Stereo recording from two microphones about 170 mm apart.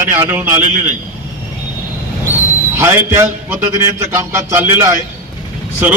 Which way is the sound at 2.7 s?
15° right (ahead or behind).